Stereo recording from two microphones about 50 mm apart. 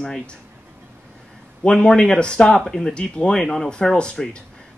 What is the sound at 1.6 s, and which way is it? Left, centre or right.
Speech, centre.